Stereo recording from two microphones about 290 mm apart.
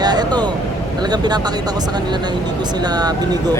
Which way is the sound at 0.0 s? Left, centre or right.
Centre.